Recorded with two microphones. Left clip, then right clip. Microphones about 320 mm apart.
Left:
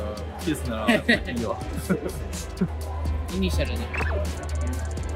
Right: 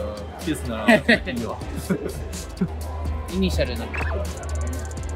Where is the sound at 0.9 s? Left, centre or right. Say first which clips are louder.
Right 5 dB; right.